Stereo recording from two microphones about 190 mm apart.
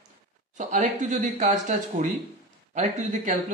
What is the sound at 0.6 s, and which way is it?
Speech, 40° right (ahead or behind).